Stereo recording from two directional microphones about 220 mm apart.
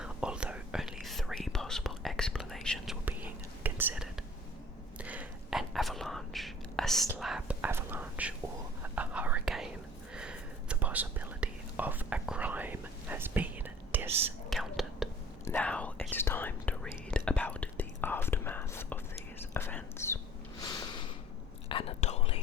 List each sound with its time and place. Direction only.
0.0 s whispering: 5° right (ahead or behind); by 20.1 s 10° left (ahead or behind)
21.7 s whispering: 25° left (ahead or behind)